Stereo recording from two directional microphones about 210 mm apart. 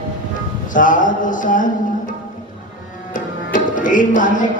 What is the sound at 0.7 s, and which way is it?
Music, 40° left (ahead or behind).